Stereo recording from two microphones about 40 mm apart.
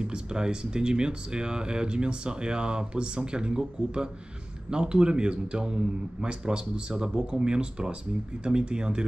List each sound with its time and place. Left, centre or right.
0.0 s speech: right